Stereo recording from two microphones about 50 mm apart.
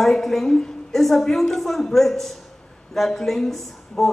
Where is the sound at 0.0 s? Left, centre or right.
Centre.